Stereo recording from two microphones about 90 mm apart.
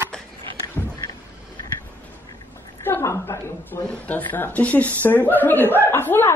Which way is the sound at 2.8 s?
30° left (ahead or behind).